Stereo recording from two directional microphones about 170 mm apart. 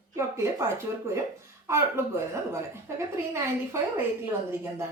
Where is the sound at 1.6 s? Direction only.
15° right (ahead or behind).